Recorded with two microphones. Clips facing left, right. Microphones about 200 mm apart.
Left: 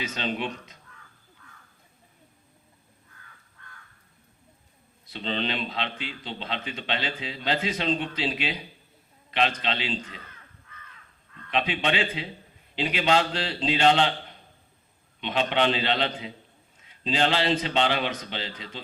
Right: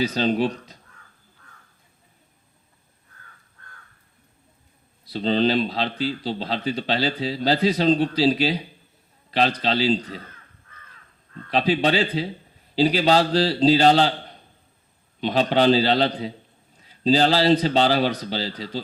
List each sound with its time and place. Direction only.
0.0 s a man's voice: 35° right (ahead or behind)
5.0 s a man's voice: 35° right (ahead or behind)
11.3 s a man's voice: 35° right (ahead or behind)